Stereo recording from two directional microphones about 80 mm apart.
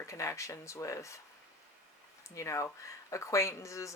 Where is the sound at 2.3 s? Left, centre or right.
Left.